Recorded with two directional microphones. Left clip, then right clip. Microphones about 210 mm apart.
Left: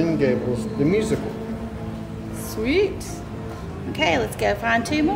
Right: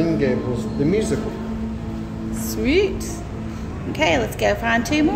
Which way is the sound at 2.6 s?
10° right (ahead or behind).